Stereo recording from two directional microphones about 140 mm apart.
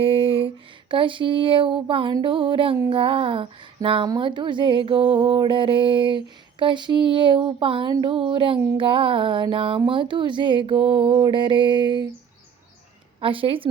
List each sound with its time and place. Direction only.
0.0 s a sound: 40° right (ahead or behind)
2.2 s mantra: 35° right (ahead or behind)
13.1 s mantra: 40° right (ahead or behind)